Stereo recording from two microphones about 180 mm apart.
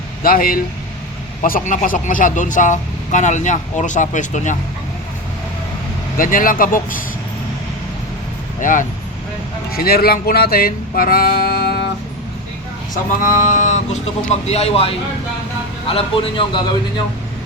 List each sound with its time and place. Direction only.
0.2 s speech: 50° left (ahead or behind)
6.1 s speech: 50° left (ahead or behind)
8.6 s speech: 45° left (ahead or behind)
12.9 s a man's voice: 45° left (ahead or behind); by 16.6 s 30° left (ahead or behind)